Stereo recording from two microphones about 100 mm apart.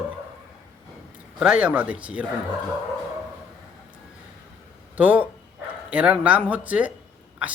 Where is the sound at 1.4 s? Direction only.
10° right (ahead or behind).